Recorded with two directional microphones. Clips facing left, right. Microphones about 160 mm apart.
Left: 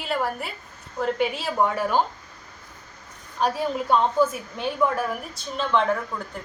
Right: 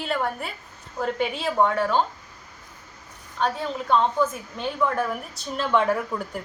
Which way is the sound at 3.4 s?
10° left (ahead or behind).